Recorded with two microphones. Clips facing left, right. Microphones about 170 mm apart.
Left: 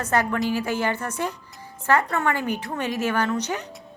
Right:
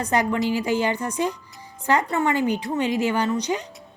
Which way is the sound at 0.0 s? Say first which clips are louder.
Right 1 dB; 15° right (ahead or behind).